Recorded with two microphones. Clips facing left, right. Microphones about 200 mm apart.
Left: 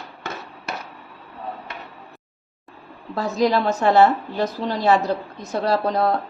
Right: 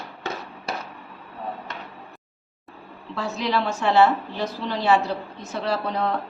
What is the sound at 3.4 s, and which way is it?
Speech, 40° left (ahead or behind).